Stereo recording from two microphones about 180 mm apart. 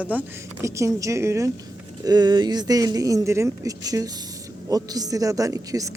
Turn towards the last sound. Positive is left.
turn(degrees=-20)  # may be behind; listen again after turning